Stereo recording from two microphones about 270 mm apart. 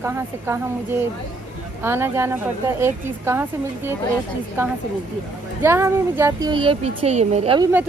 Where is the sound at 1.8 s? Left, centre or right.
Centre.